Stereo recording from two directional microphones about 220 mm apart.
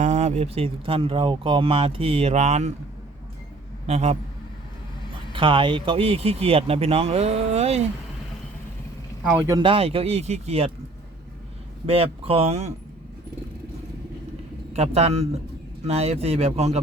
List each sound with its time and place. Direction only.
0.0 s speech: 35° right (ahead or behind)
3.8 s speech: 30° right (ahead or behind)
5.3 s speech: 20° right (ahead or behind)
9.4 s speech: 15° right (ahead or behind)
11.9 s speech: 25° right (ahead or behind)
14.7 s speech: 30° right (ahead or behind)